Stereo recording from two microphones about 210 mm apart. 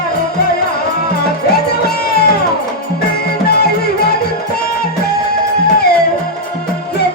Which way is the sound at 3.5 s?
50° left (ahead or behind).